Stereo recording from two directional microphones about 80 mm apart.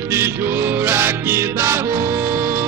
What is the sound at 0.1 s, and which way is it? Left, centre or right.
Music, right.